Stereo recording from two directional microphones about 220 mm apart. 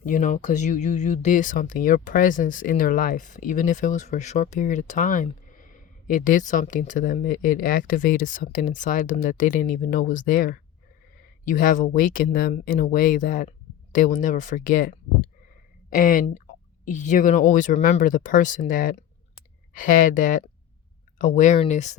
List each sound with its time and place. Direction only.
0.0 s speech: 35° left (ahead or behind)